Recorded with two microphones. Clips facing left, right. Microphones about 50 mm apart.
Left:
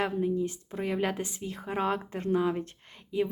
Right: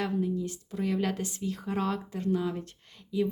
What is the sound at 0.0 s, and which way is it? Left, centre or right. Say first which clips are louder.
A woman's voice: left 2 dB; left.